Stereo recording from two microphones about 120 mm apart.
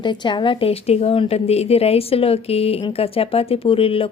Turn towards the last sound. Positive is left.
turn(degrees=50)  # may be behind; listen again after turning